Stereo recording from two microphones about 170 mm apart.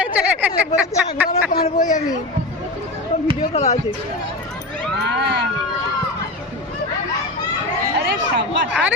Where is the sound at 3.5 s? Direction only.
35° left (ahead or behind).